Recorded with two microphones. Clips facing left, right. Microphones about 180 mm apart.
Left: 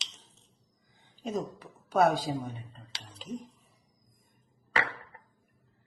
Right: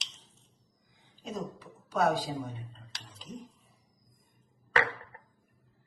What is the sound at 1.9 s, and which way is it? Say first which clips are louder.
Speech: left 3 dB; 55° left (ahead or behind).